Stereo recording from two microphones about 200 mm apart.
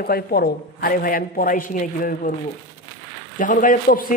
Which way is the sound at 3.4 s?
40° left (ahead or behind).